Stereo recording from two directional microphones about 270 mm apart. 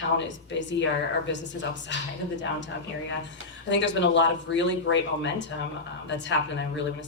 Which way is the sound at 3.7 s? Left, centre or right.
Left.